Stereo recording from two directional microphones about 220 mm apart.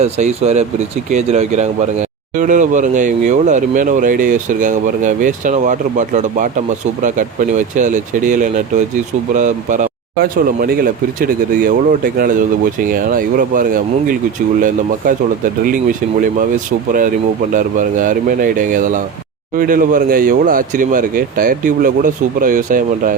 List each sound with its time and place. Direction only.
0.0 s speech: 30° right (ahead or behind)
15.6 s speech: 40° right (ahead or behind)
17.5 s speech: 35° right (ahead or behind)